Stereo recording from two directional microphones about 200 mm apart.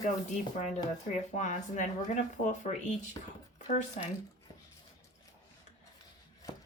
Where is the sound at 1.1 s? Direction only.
35° left (ahead or behind).